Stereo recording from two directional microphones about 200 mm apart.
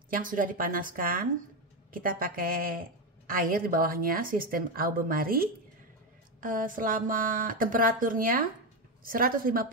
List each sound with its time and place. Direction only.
0.1 s speech: 45° right (ahead or behind)